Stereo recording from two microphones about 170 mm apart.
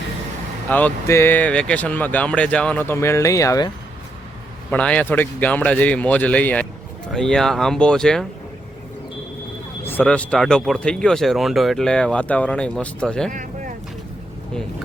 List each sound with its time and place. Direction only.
0.7 s speech: 10° left (ahead or behind)
4.7 s speech: 5° left (ahead or behind)
9.8 s speech: 10° left (ahead or behind)
13.3 s vehicle: 50° right (ahead or behind)